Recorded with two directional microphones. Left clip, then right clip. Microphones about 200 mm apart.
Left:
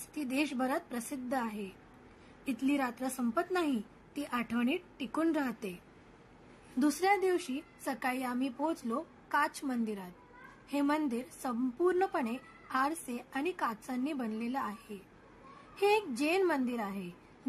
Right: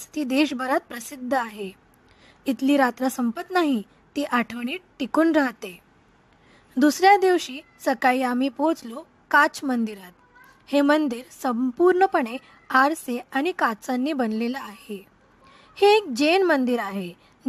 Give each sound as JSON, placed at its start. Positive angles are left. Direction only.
{"t": 0.1, "sound": "speech", "side_deg": -45}
{"t": 6.8, "sound": "a woman's voice", "side_deg": -45}